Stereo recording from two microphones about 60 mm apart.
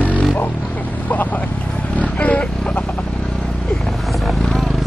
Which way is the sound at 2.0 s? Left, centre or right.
Left.